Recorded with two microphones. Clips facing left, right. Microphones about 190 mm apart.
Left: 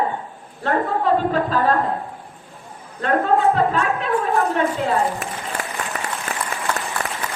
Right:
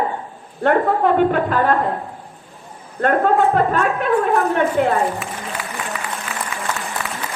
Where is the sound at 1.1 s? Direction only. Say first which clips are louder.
Right 3 dB; 60° right (ahead or behind).